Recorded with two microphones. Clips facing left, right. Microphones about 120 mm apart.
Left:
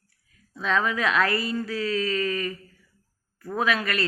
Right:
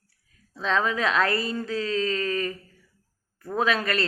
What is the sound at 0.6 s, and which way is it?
Speech, 30° right (ahead or behind).